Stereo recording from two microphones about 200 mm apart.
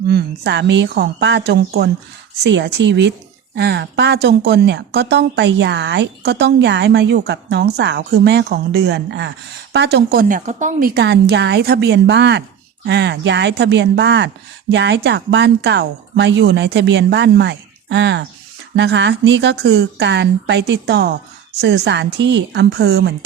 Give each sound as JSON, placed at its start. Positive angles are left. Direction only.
{"t": 0.1, "sound": "speech", "side_deg": -55}